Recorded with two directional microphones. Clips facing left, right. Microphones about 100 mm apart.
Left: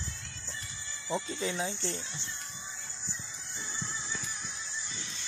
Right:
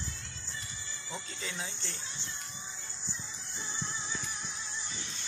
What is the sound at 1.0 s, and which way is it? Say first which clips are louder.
Speech: left 10 dB; 40° left (ahead or behind).